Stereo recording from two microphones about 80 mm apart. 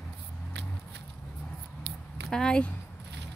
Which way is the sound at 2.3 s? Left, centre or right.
Centre.